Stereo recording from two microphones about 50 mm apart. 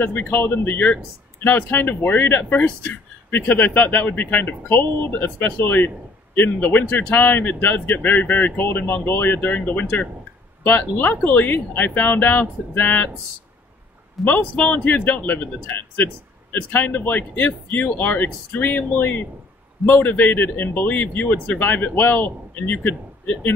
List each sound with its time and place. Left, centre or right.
0.0 s a man's voice: left
14.2 s a man's voice: centre
14.5 s speech: left
16.7 s speech: left